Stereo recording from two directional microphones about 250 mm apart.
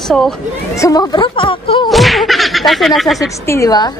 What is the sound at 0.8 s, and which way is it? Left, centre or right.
Speech, centre.